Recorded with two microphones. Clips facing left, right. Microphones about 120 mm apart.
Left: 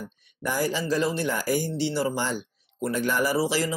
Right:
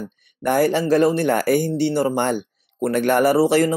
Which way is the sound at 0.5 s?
60° right (ahead or behind).